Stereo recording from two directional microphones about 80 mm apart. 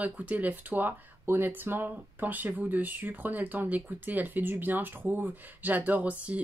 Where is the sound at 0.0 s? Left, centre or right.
Centre.